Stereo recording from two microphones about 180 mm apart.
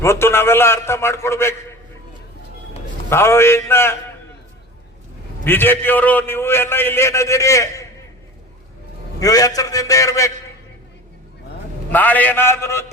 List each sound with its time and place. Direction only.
0.0 s a man's voice: 15° left (ahead or behind)
3.1 s a man's voice: 15° left (ahead or behind)
5.5 s a man's voice: 10° left (ahead or behind)
9.2 s a man's voice: 20° left (ahead or behind)
11.9 s a man's voice: 10° left (ahead or behind)